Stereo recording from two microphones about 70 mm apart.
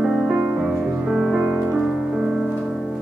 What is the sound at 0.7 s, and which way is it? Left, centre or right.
Music, centre.